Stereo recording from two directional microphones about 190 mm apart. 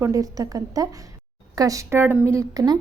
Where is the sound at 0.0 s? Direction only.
20° right (ahead or behind).